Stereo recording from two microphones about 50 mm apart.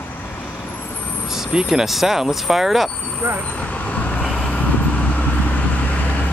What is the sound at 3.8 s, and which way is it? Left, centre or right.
Vehicle, left.